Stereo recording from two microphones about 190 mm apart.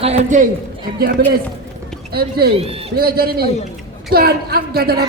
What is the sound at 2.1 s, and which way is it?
A man's voice, 55° right (ahead or behind).